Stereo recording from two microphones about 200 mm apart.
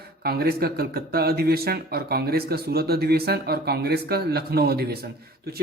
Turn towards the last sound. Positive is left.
turn(degrees=-50)  # may be behind; listen again after turning